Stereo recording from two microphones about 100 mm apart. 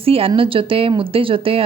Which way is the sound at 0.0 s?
70° right (ahead or behind).